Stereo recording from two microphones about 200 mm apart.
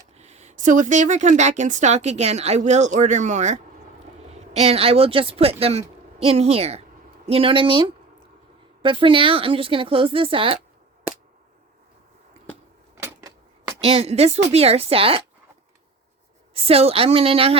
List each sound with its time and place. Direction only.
0.2 s a woman's voice: 35° right (ahead or behind)
13.1 s typewriter: 15° right (ahead or behind)
13.8 s a woman's voice: 30° right (ahead or behind)
16.6 s speech: 30° right (ahead or behind)